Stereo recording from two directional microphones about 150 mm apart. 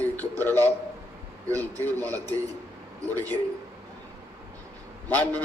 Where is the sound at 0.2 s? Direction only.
10° left (ahead or behind).